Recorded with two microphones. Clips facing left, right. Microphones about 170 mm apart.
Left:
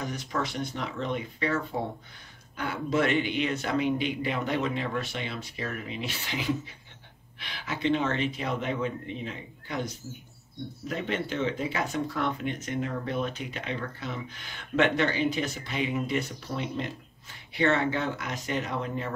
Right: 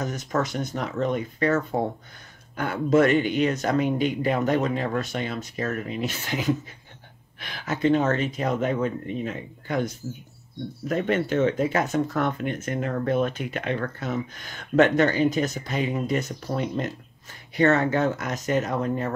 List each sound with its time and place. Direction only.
0.0 s speech: 45° right (ahead or behind)
10.9 s speech: 50° right (ahead or behind)